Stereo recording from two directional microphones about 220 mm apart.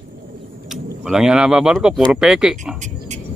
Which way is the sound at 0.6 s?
Centre (ahead or behind).